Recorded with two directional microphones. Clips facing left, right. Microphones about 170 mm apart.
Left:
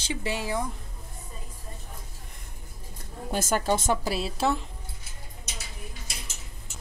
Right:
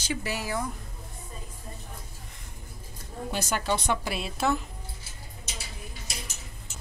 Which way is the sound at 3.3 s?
45° left (ahead or behind).